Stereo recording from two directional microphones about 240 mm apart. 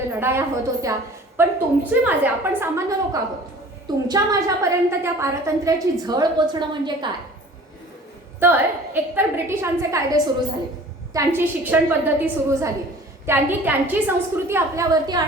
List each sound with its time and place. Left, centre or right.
0.2 s a woman's voice: centre
8.4 s a woman's voice: centre